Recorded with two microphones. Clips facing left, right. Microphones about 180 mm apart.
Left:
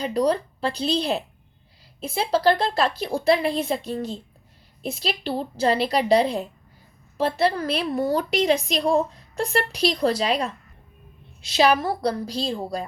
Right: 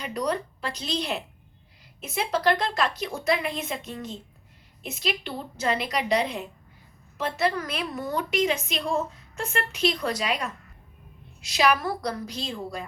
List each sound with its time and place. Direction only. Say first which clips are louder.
0.0 s a woman's voice: left 6 dB; 30° left (ahead or behind)